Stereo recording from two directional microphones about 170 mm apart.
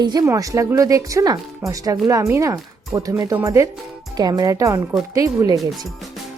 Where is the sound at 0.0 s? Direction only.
25° right (ahead or behind).